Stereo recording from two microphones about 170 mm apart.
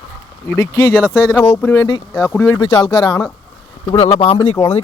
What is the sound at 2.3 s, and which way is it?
Speech, 10° left (ahead or behind).